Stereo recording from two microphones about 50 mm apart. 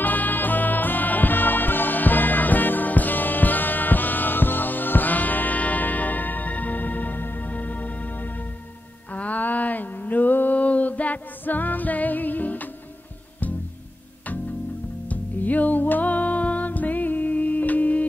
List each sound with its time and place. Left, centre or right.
0.0 s music: left
15.0 s music: left